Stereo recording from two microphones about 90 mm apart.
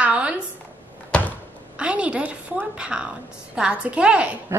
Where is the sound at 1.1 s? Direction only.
15° left (ahead or behind).